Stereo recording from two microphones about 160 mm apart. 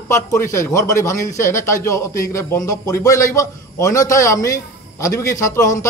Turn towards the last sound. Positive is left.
turn(degrees=20)  # may be behind; listen again after turning